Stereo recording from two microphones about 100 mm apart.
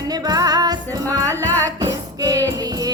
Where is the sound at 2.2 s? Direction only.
35° right (ahead or behind).